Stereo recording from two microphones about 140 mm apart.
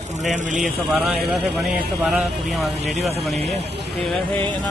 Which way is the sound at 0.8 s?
Centre (ahead or behind).